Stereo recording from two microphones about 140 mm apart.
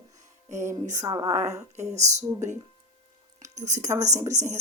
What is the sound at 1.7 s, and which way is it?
Speech, 55° right (ahead or behind).